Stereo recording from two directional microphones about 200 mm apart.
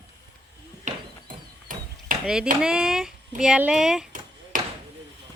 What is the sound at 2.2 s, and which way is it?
Speech, 5° right (ahead or behind).